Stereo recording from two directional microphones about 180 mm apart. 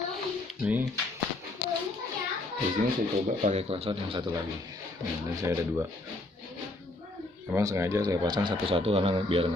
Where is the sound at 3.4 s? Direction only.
35° right (ahead or behind).